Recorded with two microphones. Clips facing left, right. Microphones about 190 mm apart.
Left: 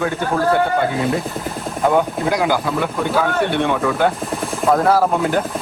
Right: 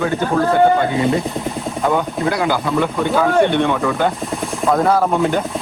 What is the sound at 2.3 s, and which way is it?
Speech, 10° left (ahead or behind).